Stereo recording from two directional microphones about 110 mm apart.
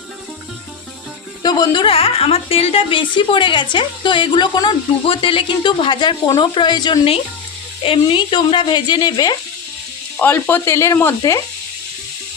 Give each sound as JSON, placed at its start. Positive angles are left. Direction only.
{"t": 1.4, "sound": "a woman's voice", "side_deg": 35}
{"t": 10.2, "sound": "speech", "side_deg": 15}
{"t": 11.2, "sound": "speech", "side_deg": 35}